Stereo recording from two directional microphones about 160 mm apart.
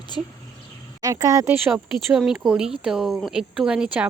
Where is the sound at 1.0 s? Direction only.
20° right (ahead or behind).